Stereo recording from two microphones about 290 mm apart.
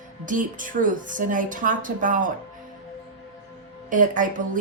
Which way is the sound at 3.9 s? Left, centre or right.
Right.